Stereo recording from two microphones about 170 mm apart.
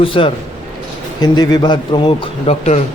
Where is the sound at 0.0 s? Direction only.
30° left (ahead or behind).